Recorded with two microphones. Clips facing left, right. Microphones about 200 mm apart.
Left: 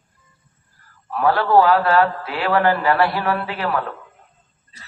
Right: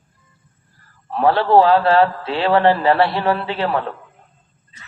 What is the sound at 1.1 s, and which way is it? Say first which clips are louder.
A man's voice: right 2 dB; 25° right (ahead or behind).